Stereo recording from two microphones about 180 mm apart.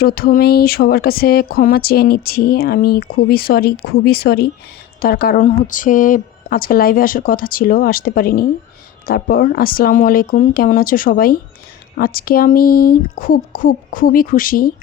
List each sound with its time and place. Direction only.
0.0 s speech: 55° left (ahead or behind)